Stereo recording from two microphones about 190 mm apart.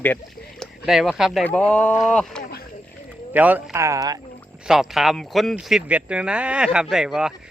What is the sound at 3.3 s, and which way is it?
Speech, 10° right (ahead or behind).